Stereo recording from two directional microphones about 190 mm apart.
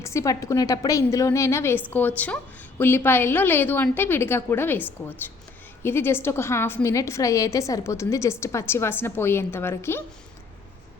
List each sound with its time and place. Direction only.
0.0 s a woman's voice: 15° left (ahead or behind)